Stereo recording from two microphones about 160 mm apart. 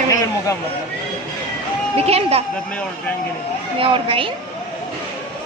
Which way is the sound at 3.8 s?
35° right (ahead or behind).